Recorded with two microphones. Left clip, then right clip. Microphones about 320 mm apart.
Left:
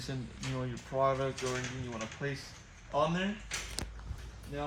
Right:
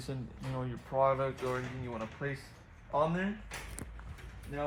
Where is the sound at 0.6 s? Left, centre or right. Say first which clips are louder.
Right 1 dB; centre.